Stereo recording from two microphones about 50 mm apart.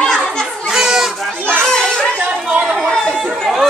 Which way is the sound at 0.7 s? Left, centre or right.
Centre.